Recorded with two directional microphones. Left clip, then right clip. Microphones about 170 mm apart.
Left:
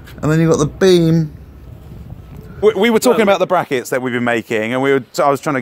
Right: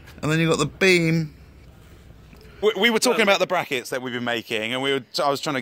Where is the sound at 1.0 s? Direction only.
5° left (ahead or behind).